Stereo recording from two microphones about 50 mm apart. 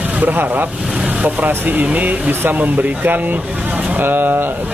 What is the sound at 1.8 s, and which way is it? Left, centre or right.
Speech, right.